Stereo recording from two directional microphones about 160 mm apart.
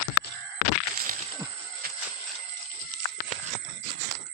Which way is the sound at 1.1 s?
60° right (ahead or behind).